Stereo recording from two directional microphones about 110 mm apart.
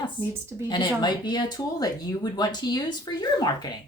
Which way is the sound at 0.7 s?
40° left (ahead or behind).